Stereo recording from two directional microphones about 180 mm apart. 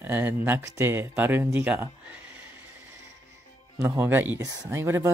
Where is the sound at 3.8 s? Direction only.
15° right (ahead or behind).